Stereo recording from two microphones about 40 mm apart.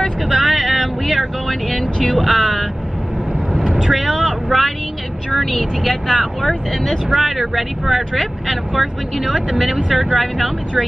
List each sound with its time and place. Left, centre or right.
0.3 s speech: centre
3.6 s vehicle: centre
3.9 s speech: centre
5.3 s speech: centre
7.1 s speech: centre